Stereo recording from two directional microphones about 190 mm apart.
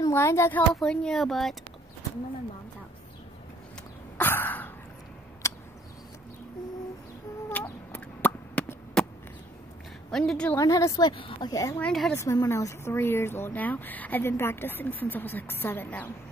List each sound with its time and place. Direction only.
0.0 s speech: 15° left (ahead or behind)
4.2 s cough: 10° left (ahead or behind)
5.4 s a sound: 15° left (ahead or behind)
7.4 s chicken: 10° left (ahead or behind)
10.1 s speech: 5° left (ahead or behind)
10.6 s a woman's voice: 20° left (ahead or behind)
11.8 s speech: 5° left (ahead or behind)
12.2 s speech: 15° left (ahead or behind)